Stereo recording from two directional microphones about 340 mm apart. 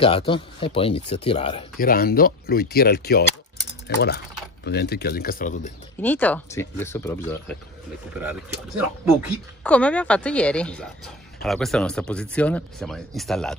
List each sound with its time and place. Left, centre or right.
0.0 s speech: centre
5.9 s speech: centre
8.2 s speech: centre